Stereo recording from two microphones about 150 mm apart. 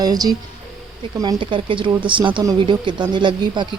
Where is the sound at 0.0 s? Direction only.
25° right (ahead or behind).